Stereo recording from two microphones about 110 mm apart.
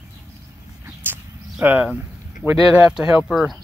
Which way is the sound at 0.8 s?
15° right (ahead or behind).